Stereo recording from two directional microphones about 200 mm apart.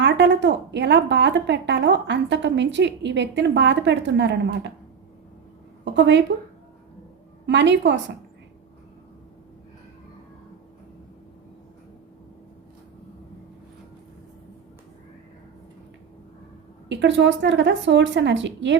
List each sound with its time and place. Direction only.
0.0 s speech: 60° right (ahead or behind)
5.8 s a woman's voice: 65° right (ahead or behind)
7.4 s speech: 60° right (ahead or behind)
16.9 s speech: 60° right (ahead or behind)